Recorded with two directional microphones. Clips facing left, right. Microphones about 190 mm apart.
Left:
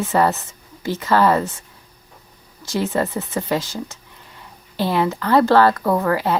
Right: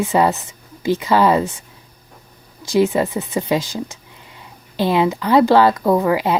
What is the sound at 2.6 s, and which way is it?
Speech, 15° right (ahead or behind).